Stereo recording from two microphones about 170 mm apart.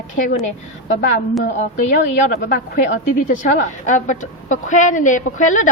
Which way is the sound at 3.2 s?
50° left (ahead or behind).